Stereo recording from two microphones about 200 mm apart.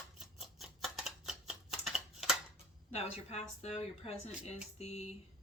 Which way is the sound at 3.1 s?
35° left (ahead or behind).